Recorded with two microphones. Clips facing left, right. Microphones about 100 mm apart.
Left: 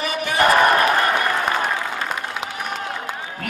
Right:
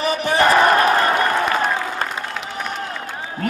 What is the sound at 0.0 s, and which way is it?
Crowd, 35° right (ahead or behind).